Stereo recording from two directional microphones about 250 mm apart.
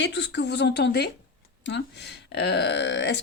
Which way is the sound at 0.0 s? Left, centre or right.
Left.